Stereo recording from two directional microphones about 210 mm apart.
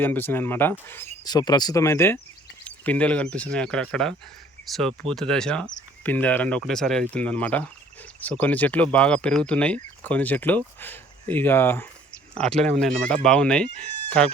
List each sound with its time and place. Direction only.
0.0 s speech: 10° left (ahead or behind)
12.5 s speech: 35° right (ahead or behind)
12.8 s speech: 5° left (ahead or behind)